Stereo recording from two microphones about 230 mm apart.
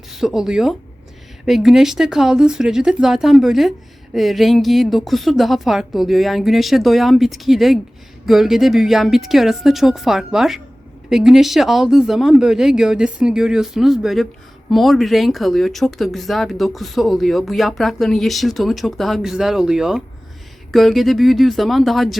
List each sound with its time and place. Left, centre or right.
0.1 s speech: centre